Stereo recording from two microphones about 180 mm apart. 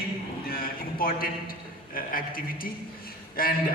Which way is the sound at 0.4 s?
55° left (ahead or behind).